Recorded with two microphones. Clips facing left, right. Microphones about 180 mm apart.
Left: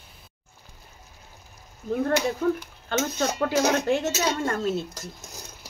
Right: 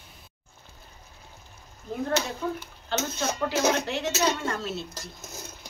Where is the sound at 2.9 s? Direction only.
50° left (ahead or behind).